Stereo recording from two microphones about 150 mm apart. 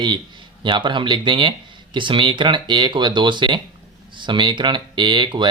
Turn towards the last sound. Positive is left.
turn(degrees=-30)  # may be behind; listen again after turning